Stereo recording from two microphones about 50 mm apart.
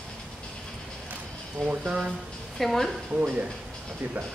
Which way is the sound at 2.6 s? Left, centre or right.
Centre.